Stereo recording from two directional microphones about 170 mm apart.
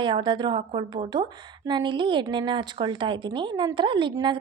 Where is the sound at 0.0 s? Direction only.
30° right (ahead or behind).